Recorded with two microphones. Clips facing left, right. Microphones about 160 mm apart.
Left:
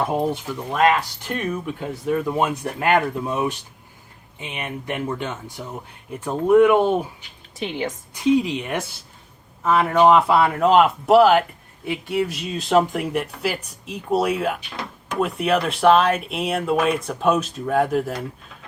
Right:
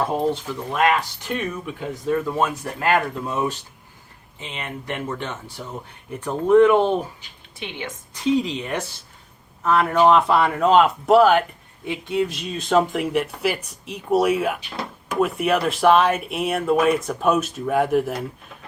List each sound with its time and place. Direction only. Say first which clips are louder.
0.0 s speech: even; 15° left (ahead or behind)
7.6 s a woman's voice: left 6 dB; 35° left (ahead or behind)
8.1 s speech: left 2 dB; 10° left (ahead or behind); by 18.2 s 5° right (ahead or behind)